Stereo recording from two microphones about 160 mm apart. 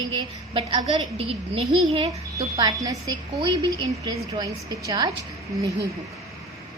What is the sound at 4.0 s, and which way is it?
A woman's voice, 25° right (ahead or behind).